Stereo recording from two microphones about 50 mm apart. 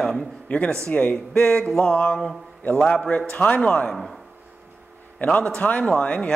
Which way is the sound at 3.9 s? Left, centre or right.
Centre.